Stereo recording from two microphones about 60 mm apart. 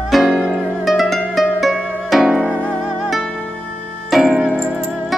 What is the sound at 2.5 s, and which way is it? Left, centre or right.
Music, centre.